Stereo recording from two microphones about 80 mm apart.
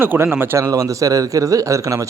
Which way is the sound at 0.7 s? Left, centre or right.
Right.